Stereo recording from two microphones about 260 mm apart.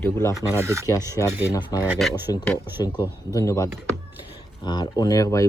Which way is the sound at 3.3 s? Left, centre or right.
Centre.